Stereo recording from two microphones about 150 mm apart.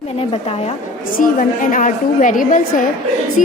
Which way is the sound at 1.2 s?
60° left (ahead or behind).